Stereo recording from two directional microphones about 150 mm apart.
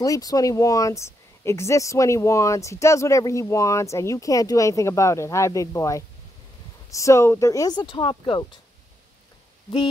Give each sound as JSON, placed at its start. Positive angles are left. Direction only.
{"t": 0.0, "sound": "speech", "side_deg": 25}